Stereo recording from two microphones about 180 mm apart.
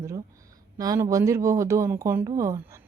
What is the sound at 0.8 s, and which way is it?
Speech, 20° right (ahead or behind).